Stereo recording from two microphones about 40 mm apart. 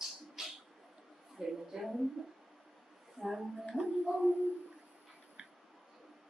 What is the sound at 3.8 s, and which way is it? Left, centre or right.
Music, centre.